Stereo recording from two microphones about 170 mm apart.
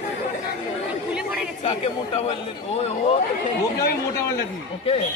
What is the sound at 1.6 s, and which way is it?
Speech, 35° left (ahead or behind).